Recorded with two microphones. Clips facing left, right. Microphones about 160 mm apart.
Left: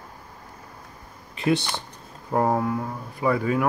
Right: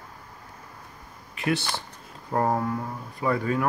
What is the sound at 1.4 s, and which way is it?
Speech, 20° left (ahead or behind).